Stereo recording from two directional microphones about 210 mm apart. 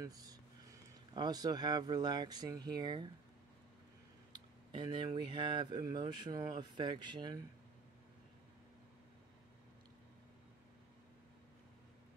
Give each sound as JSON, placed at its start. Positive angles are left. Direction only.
{"t": 0.0, "sound": "speech", "side_deg": -15}
{"t": 4.3, "sound": "speech", "side_deg": -20}